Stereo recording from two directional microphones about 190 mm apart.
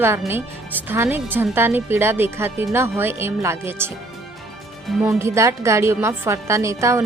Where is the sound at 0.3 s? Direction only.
10° right (ahead or behind).